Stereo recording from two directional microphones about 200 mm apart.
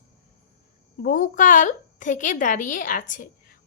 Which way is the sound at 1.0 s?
40° left (ahead or behind).